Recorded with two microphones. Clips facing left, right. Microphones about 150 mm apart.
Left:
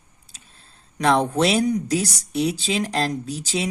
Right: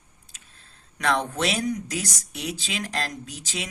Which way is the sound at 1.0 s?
35° left (ahead or behind).